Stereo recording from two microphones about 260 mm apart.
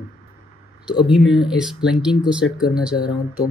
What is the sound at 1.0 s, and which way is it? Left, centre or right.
Speech, centre.